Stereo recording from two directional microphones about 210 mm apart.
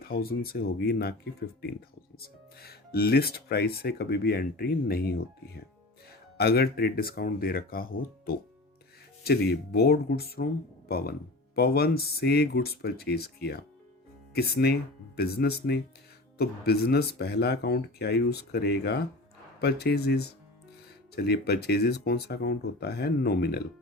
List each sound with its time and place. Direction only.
0.0 s speech: 45° left (ahead or behind)